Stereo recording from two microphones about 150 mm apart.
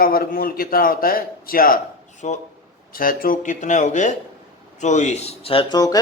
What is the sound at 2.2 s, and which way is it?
Speech, 50° left (ahead or behind).